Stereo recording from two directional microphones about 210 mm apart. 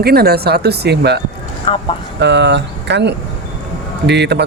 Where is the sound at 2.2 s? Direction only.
55° right (ahead or behind).